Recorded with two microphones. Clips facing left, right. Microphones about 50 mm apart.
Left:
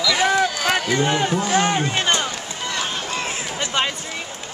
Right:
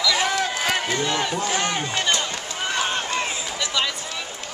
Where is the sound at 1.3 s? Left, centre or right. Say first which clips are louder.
Left 5 dB; centre.